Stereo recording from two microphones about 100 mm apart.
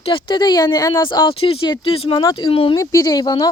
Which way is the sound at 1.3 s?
65° left (ahead or behind).